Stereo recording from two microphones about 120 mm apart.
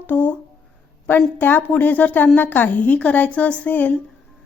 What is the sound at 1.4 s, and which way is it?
Speech, 15° left (ahead or behind).